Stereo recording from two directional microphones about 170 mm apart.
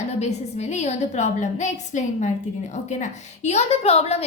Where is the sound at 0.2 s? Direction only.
40° left (ahead or behind).